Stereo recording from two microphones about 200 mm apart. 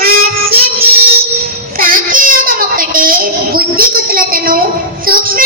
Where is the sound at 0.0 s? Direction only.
50° right (ahead or behind).